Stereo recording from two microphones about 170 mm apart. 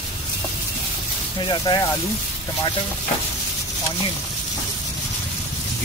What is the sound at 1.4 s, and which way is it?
Speech, 25° left (ahead or behind).